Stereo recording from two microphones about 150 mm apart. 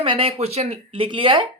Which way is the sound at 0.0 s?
40° right (ahead or behind).